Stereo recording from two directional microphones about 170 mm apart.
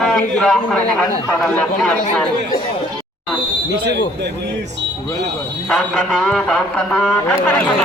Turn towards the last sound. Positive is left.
turn(degrees=10)  # may be behind; listen again after turning